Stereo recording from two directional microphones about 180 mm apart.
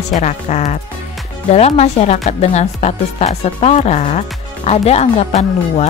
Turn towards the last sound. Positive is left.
turn(degrees=35)  # may be behind; listen again after turning